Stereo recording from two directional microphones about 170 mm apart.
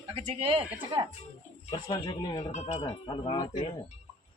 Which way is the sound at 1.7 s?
25° left (ahead or behind).